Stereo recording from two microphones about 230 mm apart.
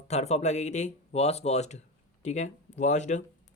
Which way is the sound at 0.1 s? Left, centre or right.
Left.